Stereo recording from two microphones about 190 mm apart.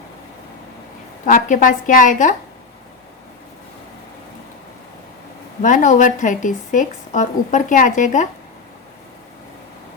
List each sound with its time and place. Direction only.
1.2 s a woman's voice: 45° left (ahead or behind)
5.6 s speech: 40° left (ahead or behind)